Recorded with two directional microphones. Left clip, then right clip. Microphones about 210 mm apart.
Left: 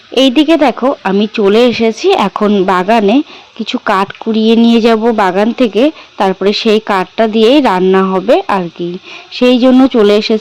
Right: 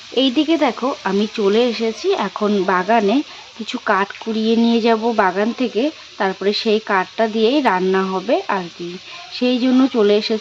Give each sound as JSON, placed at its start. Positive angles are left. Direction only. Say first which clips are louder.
{"t": 0.1, "sound": "speech", "louder": "left 8 dB", "side_deg": 30}